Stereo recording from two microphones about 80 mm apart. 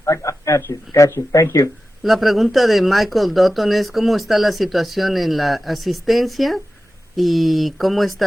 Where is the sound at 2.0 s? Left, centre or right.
Centre.